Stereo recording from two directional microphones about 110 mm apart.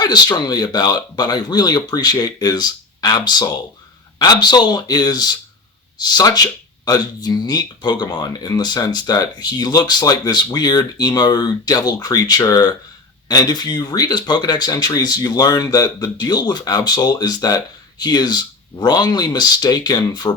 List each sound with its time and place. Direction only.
0.0 s speech: 40° left (ahead or behind)